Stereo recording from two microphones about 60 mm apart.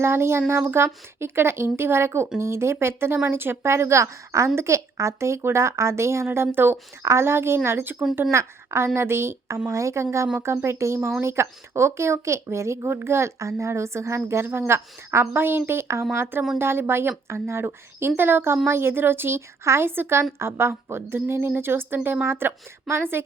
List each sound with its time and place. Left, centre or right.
0.0 s a woman's voice: right
7.0 s a woman's voice: right
9.6 s a woman's voice: right